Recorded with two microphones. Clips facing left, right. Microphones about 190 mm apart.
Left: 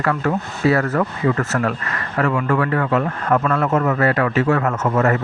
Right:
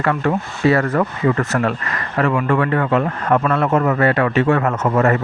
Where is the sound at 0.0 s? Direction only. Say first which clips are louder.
Right 2 dB; 25° right (ahead or behind).